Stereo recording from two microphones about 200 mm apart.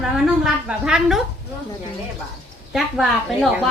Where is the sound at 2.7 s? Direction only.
Centre (ahead or behind).